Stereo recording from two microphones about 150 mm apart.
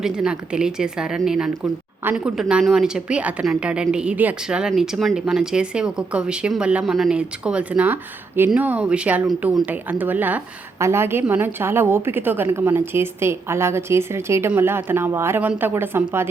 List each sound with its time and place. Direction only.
0.0 s a woman's voice: 5° right (ahead or behind)